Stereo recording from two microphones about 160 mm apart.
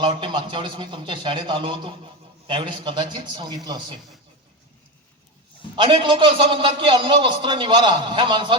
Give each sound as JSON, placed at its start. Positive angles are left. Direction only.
{"t": 0.0, "sound": "a man's voice", "side_deg": -30}
{"t": 5.7, "sound": "a man's voice", "side_deg": -30}